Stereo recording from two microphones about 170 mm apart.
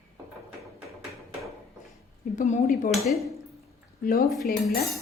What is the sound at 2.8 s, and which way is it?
Speech, centre (ahead or behind).